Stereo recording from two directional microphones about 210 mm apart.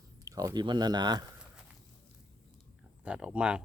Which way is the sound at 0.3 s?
15° right (ahead or behind).